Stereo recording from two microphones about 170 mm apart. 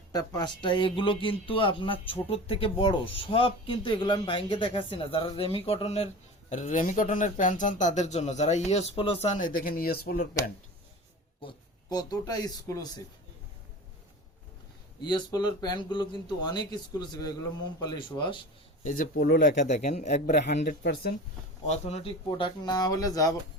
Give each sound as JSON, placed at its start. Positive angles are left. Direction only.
{"t": 0.1, "sound": "speech", "side_deg": 25}
{"t": 11.4, "sound": "speech", "side_deg": 25}
{"t": 15.0, "sound": "speech", "side_deg": 25}
{"t": 18.9, "sound": "speech", "side_deg": 60}
{"t": 19.5, "sound": "speech", "side_deg": 40}
{"t": 20.7, "sound": "speech", "side_deg": 70}
{"t": 21.7, "sound": "speech", "side_deg": 40}
{"t": 22.3, "sound": "speech", "side_deg": 25}